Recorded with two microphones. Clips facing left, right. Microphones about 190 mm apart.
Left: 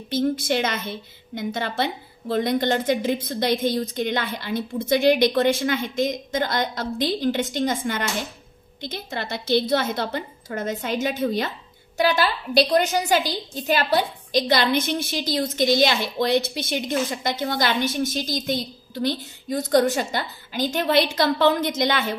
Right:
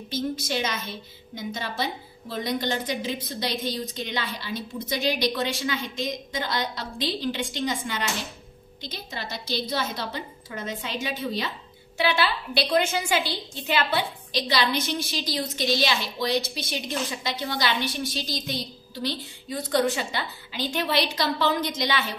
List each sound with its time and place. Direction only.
0.1 s a woman's voice: 55° left (ahead or behind)